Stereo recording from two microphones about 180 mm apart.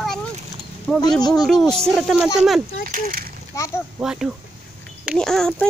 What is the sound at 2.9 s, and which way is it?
Speech, 55° right (ahead or behind).